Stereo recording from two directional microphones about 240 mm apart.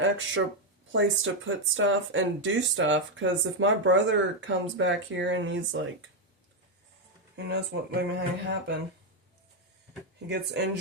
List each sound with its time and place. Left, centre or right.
0.4 s speech: right
7.3 s speech: right
10.2 s speech: right